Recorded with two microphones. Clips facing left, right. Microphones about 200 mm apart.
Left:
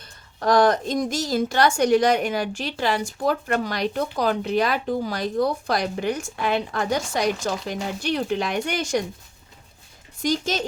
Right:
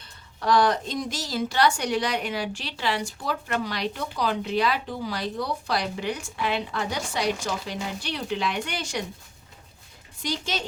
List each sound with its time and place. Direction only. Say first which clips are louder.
0.0 s a woman's voice: left 5 dB; 45° left (ahead or behind)
10.2 s a woman's voice: left 6 dB; 45° left (ahead or behind)